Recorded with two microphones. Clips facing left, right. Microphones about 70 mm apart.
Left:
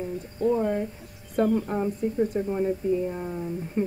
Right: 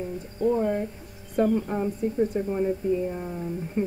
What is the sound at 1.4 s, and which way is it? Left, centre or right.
Speech, left.